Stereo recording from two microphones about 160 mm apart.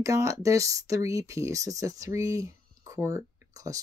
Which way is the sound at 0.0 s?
20° right (ahead or behind).